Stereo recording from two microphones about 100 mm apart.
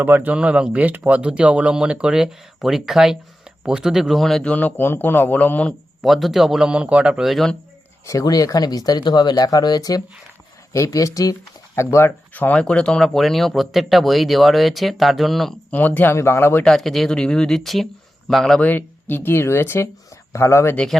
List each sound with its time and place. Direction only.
0.0 s speech: 20° right (ahead or behind); by 4.5 s 5° left (ahead or behind)
4.5 s a man's voice: 20° left (ahead or behind)
6.0 s speech: centre (ahead or behind)
8.0 s speech: 35° left (ahead or behind); by 15.5 s centre (ahead or behind)
15.7 s speech: 15° left (ahead or behind)
16.6 s speech: 5° left (ahead or behind)
18.6 s speech: 20° left (ahead or behind)
20.7 s speech: 5° left (ahead or behind)